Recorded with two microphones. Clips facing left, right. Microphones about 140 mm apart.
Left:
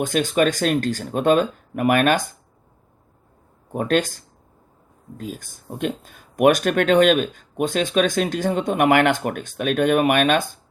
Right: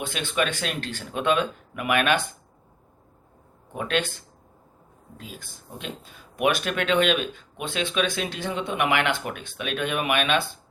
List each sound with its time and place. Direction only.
0.0 s speech: 45° left (ahead or behind)
3.7 s speech: 40° left (ahead or behind)